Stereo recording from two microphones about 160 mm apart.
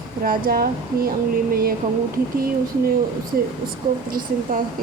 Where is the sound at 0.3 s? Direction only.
65° right (ahead or behind).